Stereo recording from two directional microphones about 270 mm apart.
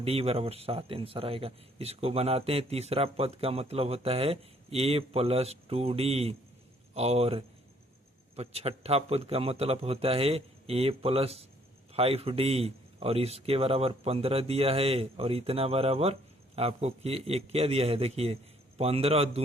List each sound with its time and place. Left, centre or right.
0.0 s speech: right